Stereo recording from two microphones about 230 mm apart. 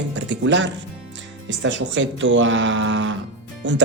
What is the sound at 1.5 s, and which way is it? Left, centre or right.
Speech, right.